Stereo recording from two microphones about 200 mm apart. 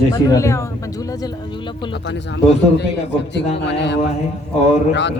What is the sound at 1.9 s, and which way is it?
Speech, 60° left (ahead or behind).